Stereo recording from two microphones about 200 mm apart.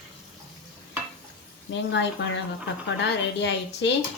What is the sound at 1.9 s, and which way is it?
Speech, 60° left (ahead or behind).